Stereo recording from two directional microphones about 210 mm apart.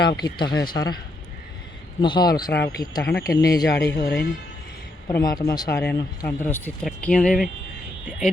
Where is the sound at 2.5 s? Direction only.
50° left (ahead or behind).